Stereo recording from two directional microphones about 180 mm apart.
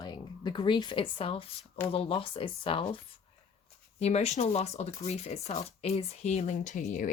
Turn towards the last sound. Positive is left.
turn(degrees=45)  # may be behind; listen again after turning